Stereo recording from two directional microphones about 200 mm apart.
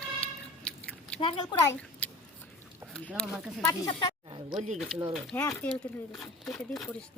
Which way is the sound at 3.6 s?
15° left (ahead or behind).